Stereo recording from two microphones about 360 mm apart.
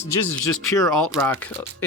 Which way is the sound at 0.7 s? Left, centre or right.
Centre.